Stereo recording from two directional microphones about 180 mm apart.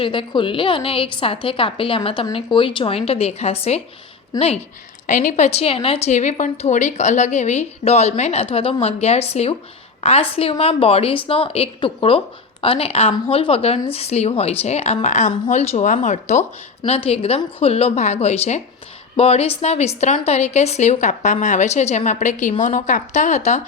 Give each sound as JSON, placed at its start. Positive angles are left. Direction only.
{"t": 0.0, "sound": "a woman's voice", "side_deg": 30}